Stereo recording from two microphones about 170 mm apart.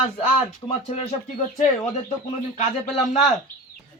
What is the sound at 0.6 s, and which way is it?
Speech, 35° left (ahead or behind).